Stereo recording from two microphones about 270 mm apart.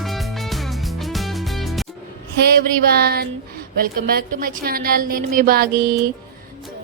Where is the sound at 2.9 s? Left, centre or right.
Right.